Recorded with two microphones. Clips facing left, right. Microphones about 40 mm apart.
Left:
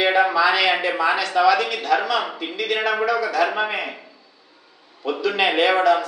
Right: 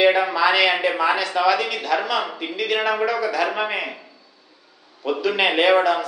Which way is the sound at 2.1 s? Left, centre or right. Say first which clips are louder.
Even; left.